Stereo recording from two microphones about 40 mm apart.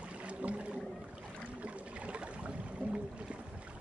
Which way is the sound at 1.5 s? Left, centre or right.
Right.